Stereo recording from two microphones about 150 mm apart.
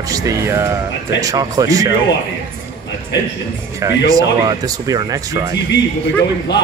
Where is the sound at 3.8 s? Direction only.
20° right (ahead or behind).